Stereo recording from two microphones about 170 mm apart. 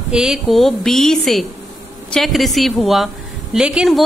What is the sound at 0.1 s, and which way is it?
A woman's voice, 5° right (ahead or behind).